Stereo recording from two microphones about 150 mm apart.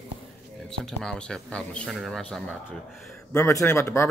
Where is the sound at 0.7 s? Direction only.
5° left (ahead or behind).